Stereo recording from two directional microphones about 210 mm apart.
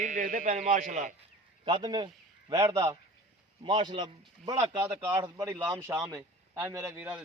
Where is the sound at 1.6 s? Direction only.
20° right (ahead or behind).